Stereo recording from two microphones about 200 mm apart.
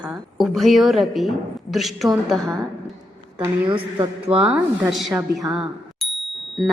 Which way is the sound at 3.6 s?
25° right (ahead or behind).